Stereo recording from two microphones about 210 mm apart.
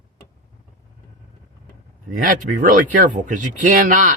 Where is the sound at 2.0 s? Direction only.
40° right (ahead or behind).